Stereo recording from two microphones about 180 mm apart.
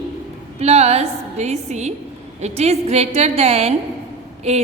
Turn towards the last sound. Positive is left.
turn(degrees=-35)  # may be behind; listen again after turning